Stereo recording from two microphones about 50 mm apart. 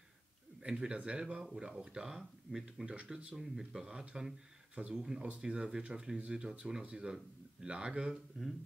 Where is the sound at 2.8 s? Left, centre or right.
Right.